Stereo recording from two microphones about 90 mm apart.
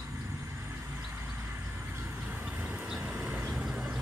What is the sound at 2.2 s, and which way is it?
Vehicle, 10° right (ahead or behind).